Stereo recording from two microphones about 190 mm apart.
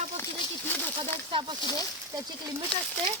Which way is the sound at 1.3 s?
25° right (ahead or behind).